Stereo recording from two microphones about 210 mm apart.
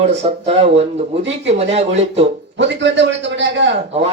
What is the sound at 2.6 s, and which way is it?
A man's voice, 60° right (ahead or behind).